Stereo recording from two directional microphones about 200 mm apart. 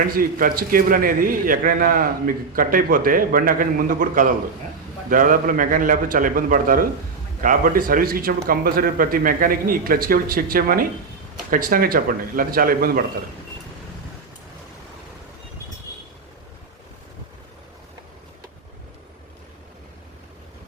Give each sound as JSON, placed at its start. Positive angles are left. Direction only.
{"t": 0.1, "sound": "a man's voice", "side_deg": -45}